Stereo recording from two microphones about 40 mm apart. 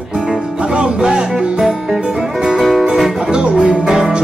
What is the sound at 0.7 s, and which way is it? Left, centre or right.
Music, right.